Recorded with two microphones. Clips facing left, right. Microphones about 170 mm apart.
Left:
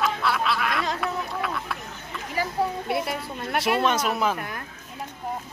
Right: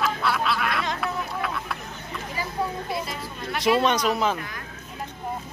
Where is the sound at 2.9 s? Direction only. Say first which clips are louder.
Left 3 dB; 65° left (ahead or behind).